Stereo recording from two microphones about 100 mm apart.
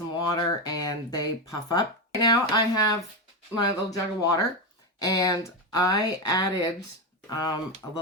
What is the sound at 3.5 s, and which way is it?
Speech, 35° left (ahead or behind).